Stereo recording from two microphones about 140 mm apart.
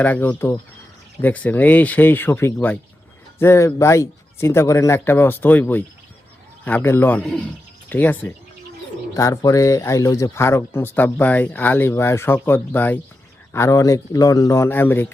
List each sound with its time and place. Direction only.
0.0 s speech: 10° left (ahead or behind)
9.1 s speech: 20° left (ahead or behind)